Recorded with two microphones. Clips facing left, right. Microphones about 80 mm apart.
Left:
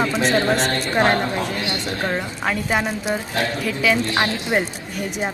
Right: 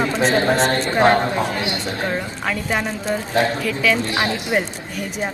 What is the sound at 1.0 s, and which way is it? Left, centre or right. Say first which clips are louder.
Speech: right 5 dB; right.